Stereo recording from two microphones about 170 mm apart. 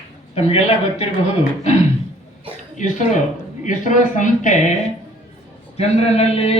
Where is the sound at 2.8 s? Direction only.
50° left (ahead or behind).